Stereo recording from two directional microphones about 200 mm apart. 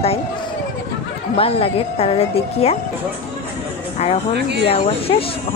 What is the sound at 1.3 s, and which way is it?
A woman's voice, 30° left (ahead or behind).